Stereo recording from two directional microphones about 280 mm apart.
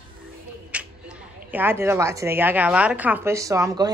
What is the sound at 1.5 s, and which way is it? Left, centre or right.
A woman's voice, centre.